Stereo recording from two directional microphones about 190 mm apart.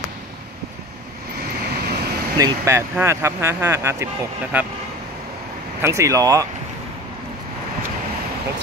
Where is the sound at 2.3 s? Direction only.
15° right (ahead or behind).